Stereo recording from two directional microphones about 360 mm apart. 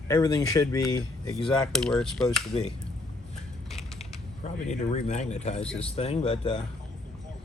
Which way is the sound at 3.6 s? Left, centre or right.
Centre.